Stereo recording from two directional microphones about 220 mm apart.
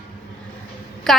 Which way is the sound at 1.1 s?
Centre (ahead or behind).